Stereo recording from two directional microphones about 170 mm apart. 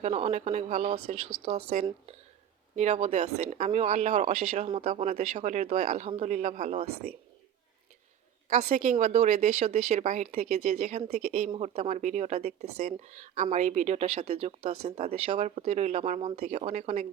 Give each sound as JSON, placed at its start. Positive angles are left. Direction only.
{"t": 0.0, "sound": "speech", "side_deg": -40}
{"t": 6.1, "sound": "speech", "side_deg": -30}
{"t": 6.3, "sound": "speech", "side_deg": -45}
{"t": 8.4, "sound": "speech", "side_deg": -45}